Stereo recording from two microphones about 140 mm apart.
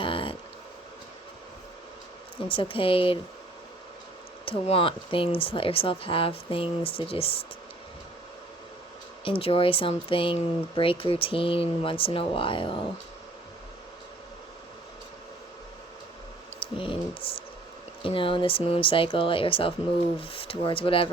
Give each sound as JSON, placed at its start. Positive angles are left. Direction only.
{"t": 0.0, "sound": "a sound", "side_deg": 40}
{"t": 2.5, "sound": "speech", "side_deg": 40}
{"t": 4.4, "sound": "speech", "side_deg": 40}
{"t": 9.2, "sound": "speech", "side_deg": 40}
{"t": 16.6, "sound": "speech", "side_deg": 40}